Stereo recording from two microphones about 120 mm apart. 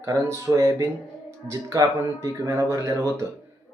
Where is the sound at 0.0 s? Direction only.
25° right (ahead or behind).